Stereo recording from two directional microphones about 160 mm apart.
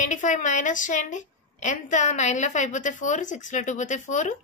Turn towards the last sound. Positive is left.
turn(degrees=50)  # may be behind; listen again after turning